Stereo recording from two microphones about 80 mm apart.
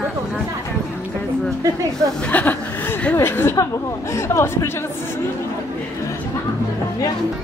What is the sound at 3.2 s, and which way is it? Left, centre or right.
A man's voice, left.